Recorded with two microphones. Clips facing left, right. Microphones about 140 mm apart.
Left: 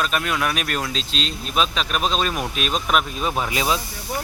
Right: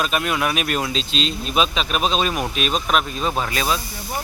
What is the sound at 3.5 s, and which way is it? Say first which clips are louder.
Speech: even; 15° left (ahead or behind).